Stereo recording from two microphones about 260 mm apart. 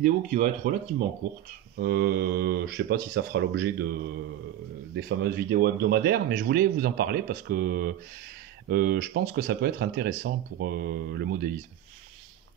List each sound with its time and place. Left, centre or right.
0.0 s speech: right
1.8 s speech: right
4.9 s speech: right